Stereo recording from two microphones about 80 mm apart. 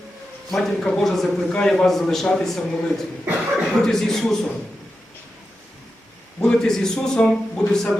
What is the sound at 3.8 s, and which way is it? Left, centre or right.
Speech, centre.